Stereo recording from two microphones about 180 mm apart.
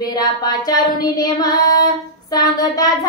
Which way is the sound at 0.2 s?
20° left (ahead or behind).